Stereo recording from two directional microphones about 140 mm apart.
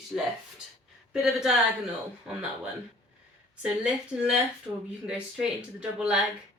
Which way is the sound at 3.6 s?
5° right (ahead or behind).